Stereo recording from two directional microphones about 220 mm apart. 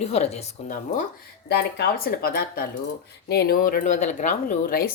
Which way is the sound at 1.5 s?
50° left (ahead or behind).